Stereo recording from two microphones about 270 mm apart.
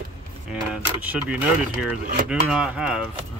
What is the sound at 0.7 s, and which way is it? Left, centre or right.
Speech, centre.